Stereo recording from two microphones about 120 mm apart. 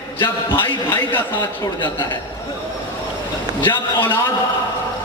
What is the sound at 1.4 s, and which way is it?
Speech, 40° left (ahead or behind).